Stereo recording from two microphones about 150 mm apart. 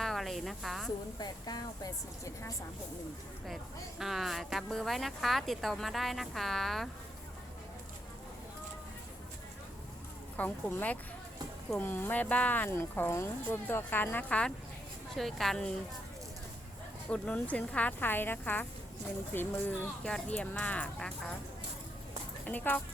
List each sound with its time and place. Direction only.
0.0 s a sound: centre (ahead or behind)
1.2 s speech: 25° left (ahead or behind)
3.4 s speech: centre (ahead or behind)
10.3 s speech: 15° left (ahead or behind)
17.1 s speech: 10° left (ahead or behind)
22.4 s speech: 10° left (ahead or behind)